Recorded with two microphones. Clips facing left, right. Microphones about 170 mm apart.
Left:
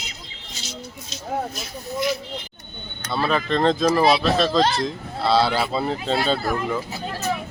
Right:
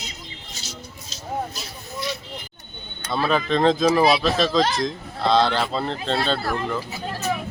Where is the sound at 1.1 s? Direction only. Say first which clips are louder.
Left 1 dB; 35° right (ahead or behind).